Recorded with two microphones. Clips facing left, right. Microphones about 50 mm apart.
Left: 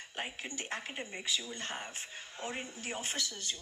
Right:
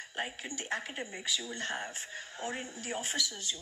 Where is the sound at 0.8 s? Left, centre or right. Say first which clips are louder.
Right 1 dB; left.